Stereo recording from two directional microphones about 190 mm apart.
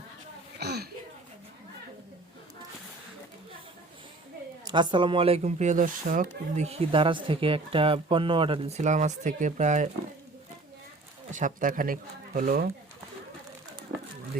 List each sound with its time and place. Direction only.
0.6 s a sound: 60° right (ahead or behind)
4.6 s speech: 25° right (ahead or behind); by 9.9 s 40° right (ahead or behind)
11.3 s speech: 40° right (ahead or behind)